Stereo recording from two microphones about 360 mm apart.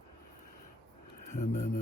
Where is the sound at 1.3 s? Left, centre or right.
Left.